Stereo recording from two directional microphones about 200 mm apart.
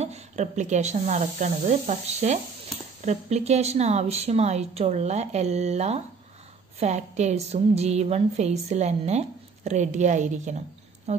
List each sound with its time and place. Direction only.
0.0 s a woman's voice: 35° right (ahead or behind)